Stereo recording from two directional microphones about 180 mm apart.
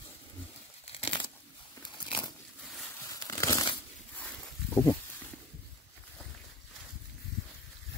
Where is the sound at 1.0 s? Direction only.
30° left (ahead or behind).